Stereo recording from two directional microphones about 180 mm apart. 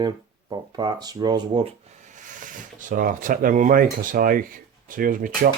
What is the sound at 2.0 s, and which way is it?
Speech, 45° right (ahead or behind).